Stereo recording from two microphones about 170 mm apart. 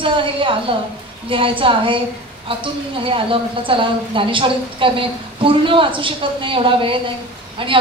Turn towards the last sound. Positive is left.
turn(degrees=-30)  # may be behind; listen again after turning